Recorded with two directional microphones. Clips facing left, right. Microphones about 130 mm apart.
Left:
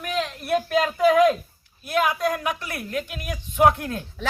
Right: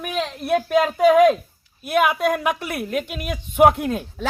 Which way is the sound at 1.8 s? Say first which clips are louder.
Right 4 dB; 70° right (ahead or behind).